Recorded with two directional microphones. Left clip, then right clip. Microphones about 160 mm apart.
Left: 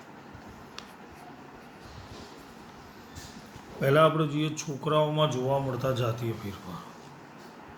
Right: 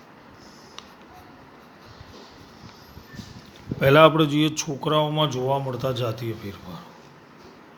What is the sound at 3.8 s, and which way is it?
Speech, 75° right (ahead or behind).